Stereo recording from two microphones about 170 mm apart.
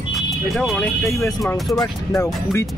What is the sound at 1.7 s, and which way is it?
Speech, 20° left (ahead or behind).